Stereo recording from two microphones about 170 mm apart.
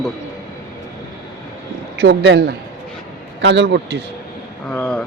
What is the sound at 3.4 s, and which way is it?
Speech, 90° right.